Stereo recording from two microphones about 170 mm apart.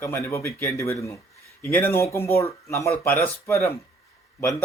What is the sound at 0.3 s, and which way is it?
Speech, 15° left (ahead or behind).